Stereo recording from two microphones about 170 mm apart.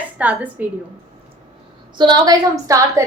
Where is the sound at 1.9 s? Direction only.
25° right (ahead or behind).